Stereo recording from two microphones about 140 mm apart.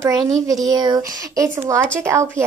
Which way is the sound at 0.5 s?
25° right (ahead or behind).